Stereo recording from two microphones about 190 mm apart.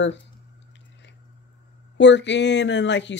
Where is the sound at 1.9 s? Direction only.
70° left (ahead or behind).